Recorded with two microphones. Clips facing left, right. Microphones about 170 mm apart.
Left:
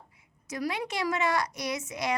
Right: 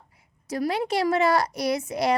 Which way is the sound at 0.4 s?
35° right (ahead or behind).